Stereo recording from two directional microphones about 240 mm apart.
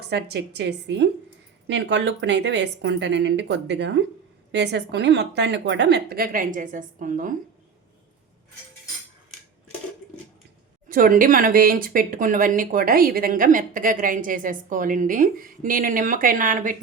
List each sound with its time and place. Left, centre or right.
0.0 s speech: right
10.8 s speech: right